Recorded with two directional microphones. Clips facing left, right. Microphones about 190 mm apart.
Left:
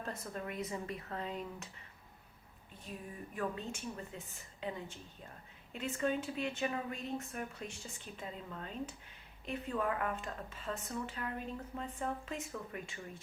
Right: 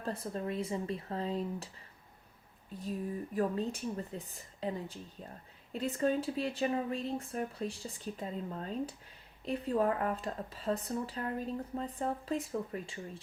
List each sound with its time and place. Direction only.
0.0 s speech: 30° right (ahead or behind)
3.3 s speech: 35° right (ahead or behind)